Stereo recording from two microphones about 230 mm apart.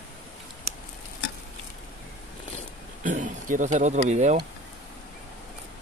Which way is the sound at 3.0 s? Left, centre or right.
Right.